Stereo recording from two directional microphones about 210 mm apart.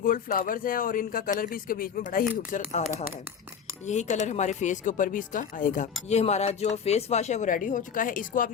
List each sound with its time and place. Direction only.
0.0 s speech: 40° left (ahead or behind)
3.8 s speech: 35° left (ahead or behind)